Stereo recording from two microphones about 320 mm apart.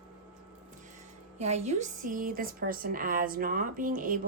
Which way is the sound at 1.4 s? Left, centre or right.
Right.